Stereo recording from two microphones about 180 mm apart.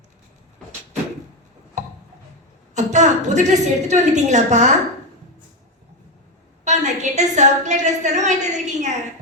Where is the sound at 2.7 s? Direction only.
40° right (ahead or behind).